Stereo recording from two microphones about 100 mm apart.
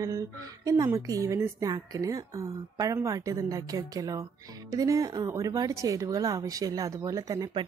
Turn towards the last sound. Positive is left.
turn(degrees=-35)  # may be behind; listen again after turning